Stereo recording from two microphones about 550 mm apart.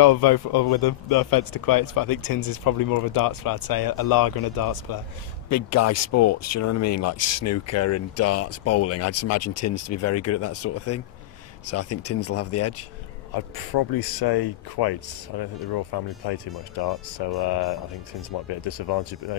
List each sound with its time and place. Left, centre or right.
0.0 s speech: left
5.5 s speech: left
13.3 s speech: left
18.7 s speech: left